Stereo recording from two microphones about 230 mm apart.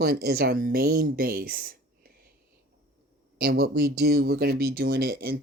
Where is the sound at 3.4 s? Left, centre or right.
Right.